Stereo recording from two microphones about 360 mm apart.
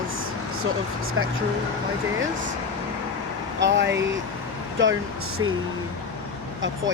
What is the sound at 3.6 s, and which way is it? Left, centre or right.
Speech, right.